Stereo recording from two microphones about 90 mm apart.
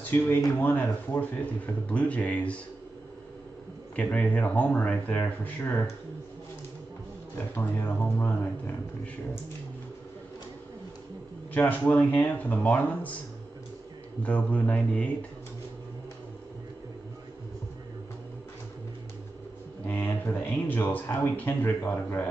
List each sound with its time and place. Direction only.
0.1 s speech: 35° left (ahead or behind)
0.6 s speech: 20° left (ahead or behind)
3.9 s speech: 15° left (ahead or behind)
7.3 s speech: 20° left (ahead or behind)
11.5 s speech: 20° left (ahead or behind)
14.2 s speech: 15° left (ahead or behind)
19.9 s speech: 20° left (ahead or behind)